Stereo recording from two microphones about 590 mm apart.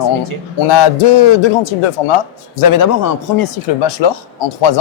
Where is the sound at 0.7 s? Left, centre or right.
Left.